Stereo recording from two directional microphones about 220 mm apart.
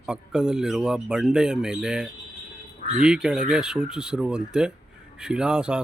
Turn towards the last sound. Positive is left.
turn(degrees=-5)  # may be behind; listen again after turning